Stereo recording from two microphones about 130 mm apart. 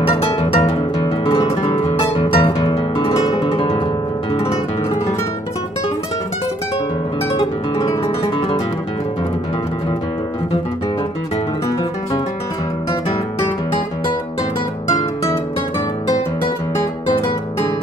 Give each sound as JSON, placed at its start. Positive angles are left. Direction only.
{"t": 0.2, "sound": "harp", "side_deg": 45}
{"t": 1.0, "sound": "music", "side_deg": 35}
{"t": 2.1, "sound": "music", "side_deg": 45}
{"t": 4.3, "sound": "music", "side_deg": 50}
{"t": 7.7, "sound": "music", "side_deg": 25}